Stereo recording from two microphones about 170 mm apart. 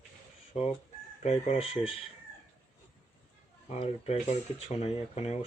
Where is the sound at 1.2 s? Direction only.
40° left (ahead or behind).